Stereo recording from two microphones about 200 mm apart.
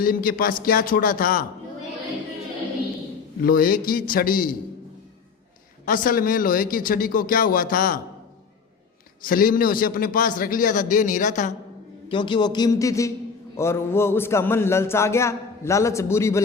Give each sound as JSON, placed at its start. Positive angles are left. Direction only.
{"t": 0.0, "sound": "a man's voice", "side_deg": 45}
{"t": 3.4, "sound": "a man's voice", "side_deg": 45}
{"t": 5.8, "sound": "a man's voice", "side_deg": 45}
{"t": 9.2, "sound": "a man's voice", "side_deg": 45}
{"t": 12.0, "sound": "a man's voice", "side_deg": 25}
{"t": 13.6, "sound": "a sound", "side_deg": 15}